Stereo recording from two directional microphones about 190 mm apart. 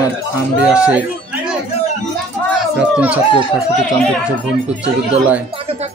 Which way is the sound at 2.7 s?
5° right (ahead or behind).